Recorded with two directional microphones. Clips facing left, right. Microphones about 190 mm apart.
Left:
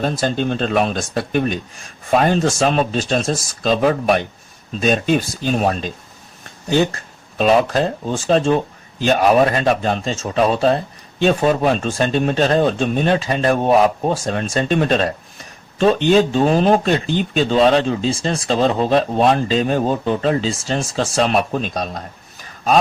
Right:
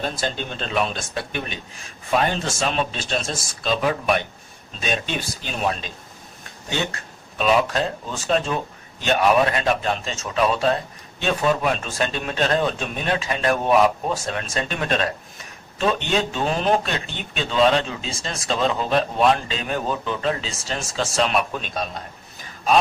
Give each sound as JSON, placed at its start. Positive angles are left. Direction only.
{"t": 0.0, "sound": "speech", "side_deg": 45}